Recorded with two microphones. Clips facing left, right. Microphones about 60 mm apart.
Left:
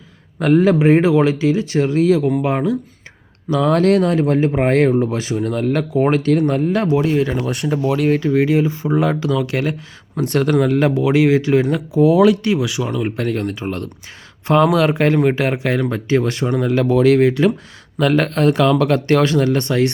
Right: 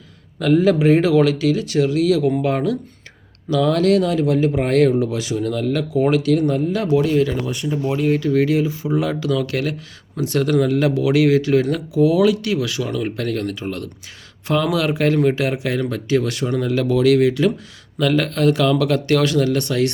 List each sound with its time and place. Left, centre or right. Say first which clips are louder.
0.3 s a man's voice: left 2 dB; left
0.6 s speech: left 2 dB; left
2.4 s speech: left 1 dB; left
3.5 s speech: left 2 dB; left
6.9 s speech: right 4 dB; left
7.4 s speech: left 3 dB; left
8.3 s speech: left 1 dB; left
8.6 s speech: left 3 dB; left
9.2 s speech: left 2 dB; left
10.2 s speech: left 2 dB; left
11.9 s speech: left 3 dB; left
12.4 s speech: left 3 dB; left
12.6 s speech: left 2 dB; centre
13.3 s speech: left 2 dB; left